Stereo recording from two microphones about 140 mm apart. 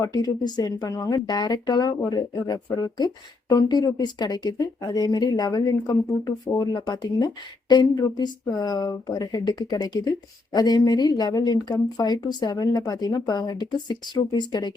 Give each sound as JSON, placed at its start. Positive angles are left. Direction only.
{"t": 0.0, "sound": "speech", "side_deg": 25}